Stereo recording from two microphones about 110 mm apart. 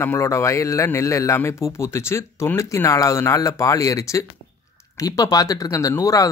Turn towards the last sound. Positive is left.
turn(degrees=30)  # may be behind; listen again after turning